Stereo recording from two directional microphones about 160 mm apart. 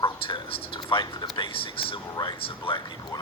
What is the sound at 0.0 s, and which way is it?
Speech, 30° left (ahead or behind).